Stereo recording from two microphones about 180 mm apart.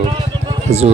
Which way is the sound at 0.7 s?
35° right (ahead or behind).